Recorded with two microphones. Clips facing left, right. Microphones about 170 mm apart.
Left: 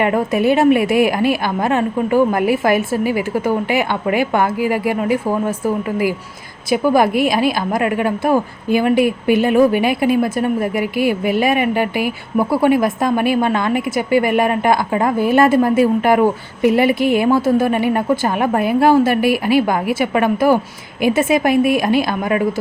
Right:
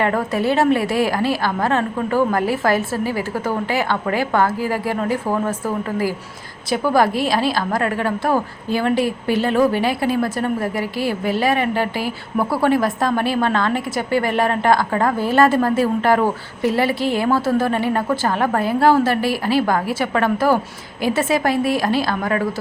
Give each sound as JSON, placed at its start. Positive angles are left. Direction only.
{"t": 0.0, "sound": "a woman's voice", "side_deg": 15}